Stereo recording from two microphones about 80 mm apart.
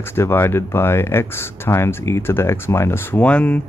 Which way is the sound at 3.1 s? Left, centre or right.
Centre.